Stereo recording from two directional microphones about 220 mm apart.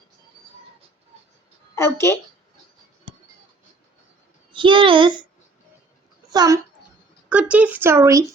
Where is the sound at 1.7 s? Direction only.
10° left (ahead or behind).